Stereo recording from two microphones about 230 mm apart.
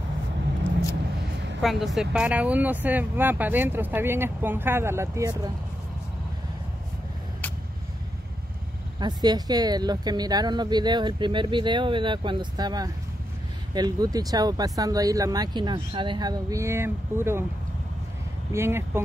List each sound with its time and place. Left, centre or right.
1.6 s speech: centre
9.0 s speech: centre
18.5 s speech: centre